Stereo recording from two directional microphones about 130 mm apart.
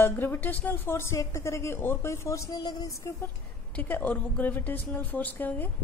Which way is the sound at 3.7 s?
15° left (ahead or behind).